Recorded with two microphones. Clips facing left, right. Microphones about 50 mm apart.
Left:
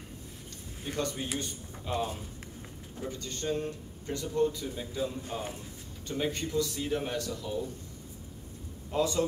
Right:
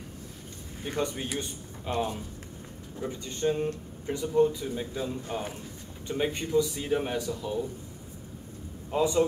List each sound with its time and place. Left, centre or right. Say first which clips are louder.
0.8 s speech: right 3 dB; centre
8.9 s speech: right 3 dB; centre